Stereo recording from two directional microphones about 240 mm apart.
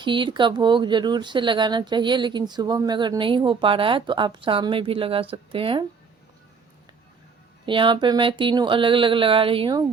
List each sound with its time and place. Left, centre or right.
0.0 s speech: centre
7.6 s speech: centre